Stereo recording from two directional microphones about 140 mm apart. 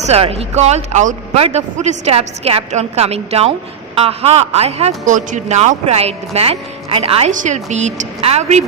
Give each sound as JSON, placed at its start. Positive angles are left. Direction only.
{"t": 0.0, "sound": "a man's voice", "side_deg": -45}
{"t": 7.3, "sound": "a woman's voice", "side_deg": -60}